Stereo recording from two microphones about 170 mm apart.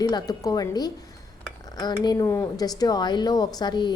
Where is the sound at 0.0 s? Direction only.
25° left (ahead or behind).